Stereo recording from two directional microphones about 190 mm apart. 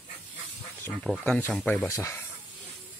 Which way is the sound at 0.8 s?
5° left (ahead or behind).